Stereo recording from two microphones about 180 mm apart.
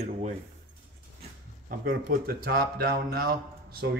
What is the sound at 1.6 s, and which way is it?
Speech, 55° right (ahead or behind).